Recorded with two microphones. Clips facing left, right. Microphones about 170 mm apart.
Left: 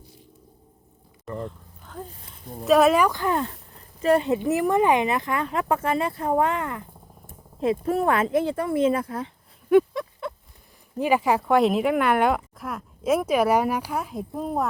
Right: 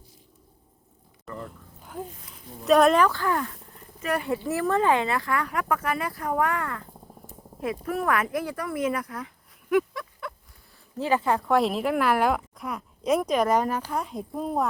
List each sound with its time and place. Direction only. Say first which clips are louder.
1.3 s speech: left 5 dB; 30° left (ahead or behind)
1.8 s speech: right 2 dB; 10° right (ahead or behind)
2.6 s speech: left 1 dB; 5° left (ahead or behind); by 10.3 s 25° left (ahead or behind)
10.9 s speech: left 3 dB; 15° left (ahead or behind)